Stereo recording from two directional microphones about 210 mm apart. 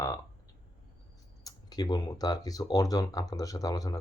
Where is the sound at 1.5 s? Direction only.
20° left (ahead or behind).